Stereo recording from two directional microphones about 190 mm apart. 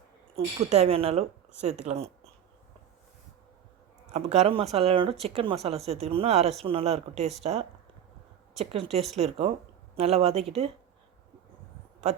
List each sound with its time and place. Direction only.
0.3 s a woman's voice: 30° right (ahead or behind)
4.1 s a woman's voice: 35° right (ahead or behind)
8.5 s a woman's voice: 35° right (ahead or behind)